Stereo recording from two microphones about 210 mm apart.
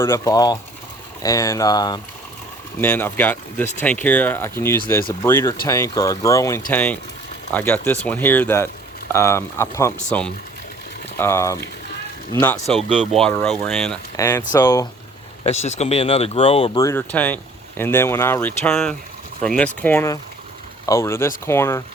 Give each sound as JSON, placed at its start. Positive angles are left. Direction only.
{"t": 0.0, "sound": "speech", "side_deg": 15}
{"t": 12.9, "sound": "speech", "side_deg": -35}
{"t": 13.1, "sound": "speech", "side_deg": 5}
{"t": 15.4, "sound": "speech", "side_deg": 30}
{"t": 16.8, "sound": "speech", "side_deg": 10}